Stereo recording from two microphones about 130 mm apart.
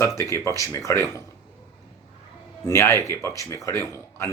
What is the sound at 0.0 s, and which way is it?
Speech, 25° left (ahead or behind).